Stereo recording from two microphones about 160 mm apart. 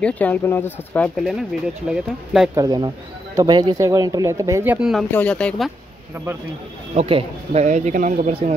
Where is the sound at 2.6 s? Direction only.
25° right (ahead or behind).